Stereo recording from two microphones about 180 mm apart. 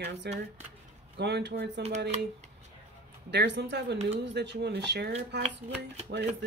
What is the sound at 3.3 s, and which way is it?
Speech, 70° right (ahead or behind).